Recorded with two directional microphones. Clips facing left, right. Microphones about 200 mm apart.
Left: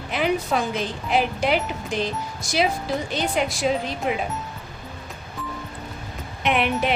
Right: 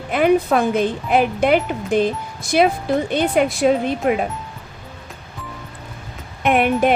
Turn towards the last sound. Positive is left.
turn(degrees=-50)  # may be behind; listen again after turning